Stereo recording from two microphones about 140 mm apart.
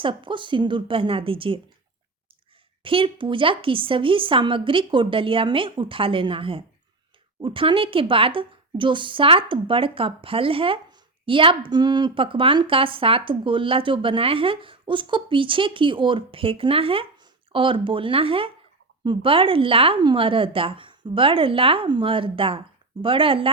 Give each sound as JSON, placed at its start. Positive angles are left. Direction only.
{"t": 0.0, "sound": "a woman's voice", "side_deg": -35}
{"t": 2.8, "sound": "a woman's voice", "side_deg": -40}